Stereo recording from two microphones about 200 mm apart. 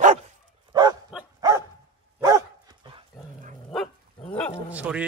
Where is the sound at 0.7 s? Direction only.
20° right (ahead or behind).